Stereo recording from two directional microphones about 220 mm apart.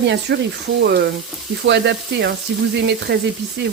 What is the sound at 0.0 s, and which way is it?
Speech, 50° right (ahead or behind).